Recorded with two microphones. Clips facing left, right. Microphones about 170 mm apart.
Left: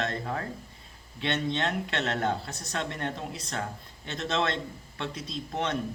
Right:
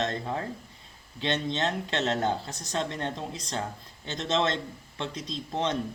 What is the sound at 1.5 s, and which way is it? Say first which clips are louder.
Speech: right 1 dB; 35° right (ahead or behind).